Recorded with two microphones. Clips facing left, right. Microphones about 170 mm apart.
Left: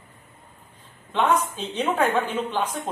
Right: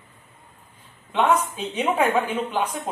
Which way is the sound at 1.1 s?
5° right (ahead or behind).